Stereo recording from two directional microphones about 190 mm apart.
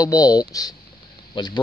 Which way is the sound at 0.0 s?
20° left (ahead or behind).